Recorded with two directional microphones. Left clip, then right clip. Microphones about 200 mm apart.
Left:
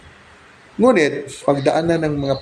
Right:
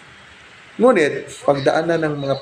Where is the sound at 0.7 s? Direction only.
50° left (ahead or behind).